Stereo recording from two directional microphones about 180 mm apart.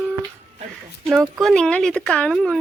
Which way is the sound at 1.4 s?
5° left (ahead or behind).